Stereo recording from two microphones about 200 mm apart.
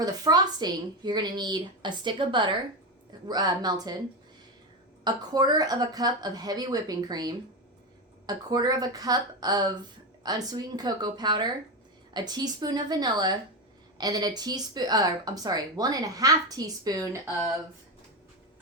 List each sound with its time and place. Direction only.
0.0 s speech: 20° right (ahead or behind)
5.0 s speech: 20° right (ahead or behind)